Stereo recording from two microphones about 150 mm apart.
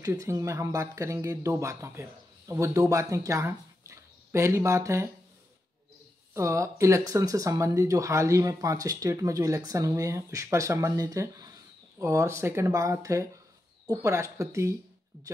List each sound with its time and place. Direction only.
0.0 s speech: 20° right (ahead or behind)
6.3 s speech: 20° right (ahead or behind)